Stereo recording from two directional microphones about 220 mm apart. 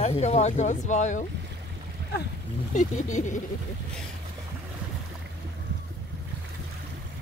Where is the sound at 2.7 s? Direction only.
35° left (ahead or behind).